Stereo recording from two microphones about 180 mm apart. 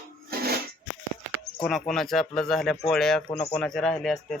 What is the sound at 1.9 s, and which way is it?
Speech, centre (ahead or behind).